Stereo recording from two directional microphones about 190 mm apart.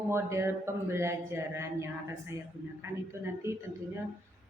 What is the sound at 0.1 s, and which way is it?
A man's voice, 15° right (ahead or behind).